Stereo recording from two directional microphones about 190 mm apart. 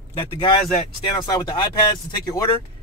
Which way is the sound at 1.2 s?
20° left (ahead or behind).